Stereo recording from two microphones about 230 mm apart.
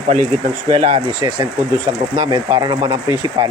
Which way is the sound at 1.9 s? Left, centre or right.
Right.